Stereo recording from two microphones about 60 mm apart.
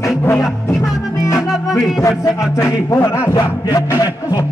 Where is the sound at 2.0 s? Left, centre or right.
Left.